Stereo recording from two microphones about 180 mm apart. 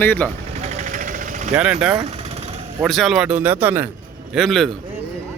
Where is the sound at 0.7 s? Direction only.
40° right (ahead or behind).